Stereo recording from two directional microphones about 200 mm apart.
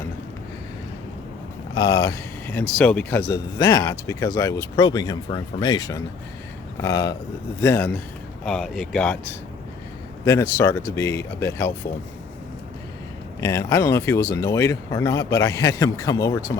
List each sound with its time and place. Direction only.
1.7 s speech: 20° left (ahead or behind)
10.2 s speech: 10° left (ahead or behind)
13.4 s speech: 15° left (ahead or behind)